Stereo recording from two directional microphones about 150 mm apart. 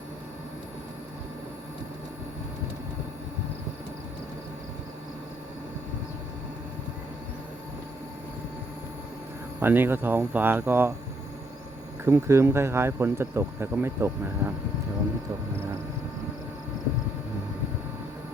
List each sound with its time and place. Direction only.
9.6 s speech: 15° right (ahead or behind)
12.0 s speech: 15° right (ahead or behind)